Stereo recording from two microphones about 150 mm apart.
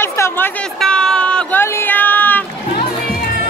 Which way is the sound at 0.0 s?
15° left (ahead or behind).